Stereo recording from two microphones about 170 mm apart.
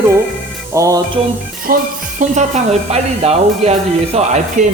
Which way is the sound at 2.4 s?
40° right (ahead or behind).